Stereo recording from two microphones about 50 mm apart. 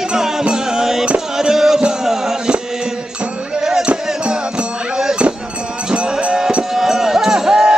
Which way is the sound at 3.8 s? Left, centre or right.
Right.